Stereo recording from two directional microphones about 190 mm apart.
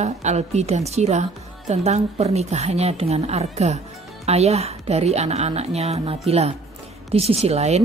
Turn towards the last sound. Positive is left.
turn(degrees=-35)  # may be behind; listen again after turning